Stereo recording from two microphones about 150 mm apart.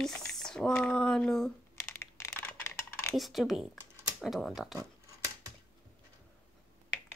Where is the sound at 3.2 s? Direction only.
Centre (ahead or behind).